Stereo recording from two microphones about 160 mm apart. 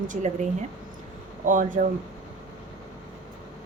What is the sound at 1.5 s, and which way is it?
Speech, 55° right (ahead or behind).